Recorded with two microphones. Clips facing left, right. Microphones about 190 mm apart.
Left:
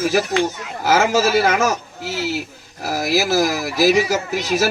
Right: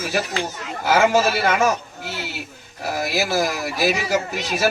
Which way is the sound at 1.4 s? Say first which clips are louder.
Left 2 dB; 45° left (ahead or behind).